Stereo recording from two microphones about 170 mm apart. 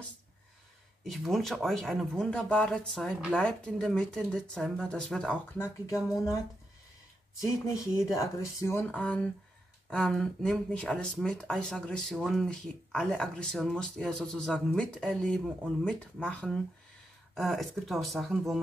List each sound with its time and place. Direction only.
1.0 s speech: centre (ahead or behind)
8.1 s speech: 15° left (ahead or behind); by 18.6 s centre (ahead or behind)